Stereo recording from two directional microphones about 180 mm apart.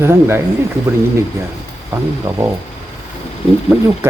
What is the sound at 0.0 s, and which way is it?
Speech, 15° right (ahead or behind).